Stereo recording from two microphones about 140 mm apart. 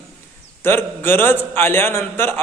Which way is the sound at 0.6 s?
15° left (ahead or behind).